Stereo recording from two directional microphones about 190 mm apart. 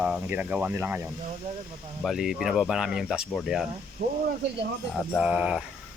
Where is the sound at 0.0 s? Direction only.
5° right (ahead or behind).